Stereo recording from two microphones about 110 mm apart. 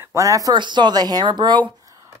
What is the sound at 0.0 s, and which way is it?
Speech, 30° right (ahead or behind).